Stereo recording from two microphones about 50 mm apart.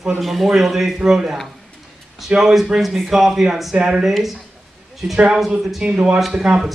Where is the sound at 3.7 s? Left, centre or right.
Centre.